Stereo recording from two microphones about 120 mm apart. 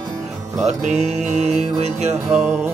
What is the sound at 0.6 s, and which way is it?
Speech, 70° right (ahead or behind).